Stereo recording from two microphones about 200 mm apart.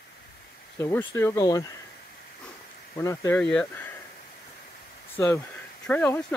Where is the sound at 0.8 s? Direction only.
10° left (ahead or behind).